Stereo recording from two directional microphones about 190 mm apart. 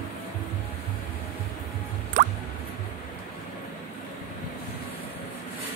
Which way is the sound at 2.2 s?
40° right (ahead or behind).